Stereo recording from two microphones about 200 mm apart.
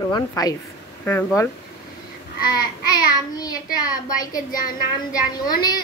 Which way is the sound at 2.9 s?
20° left (ahead or behind).